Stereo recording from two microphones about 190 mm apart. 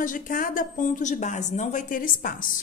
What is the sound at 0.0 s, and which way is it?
Speech, 45° left (ahead or behind).